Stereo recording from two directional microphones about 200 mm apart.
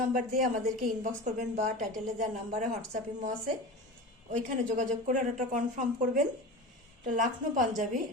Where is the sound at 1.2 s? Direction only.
35° right (ahead or behind).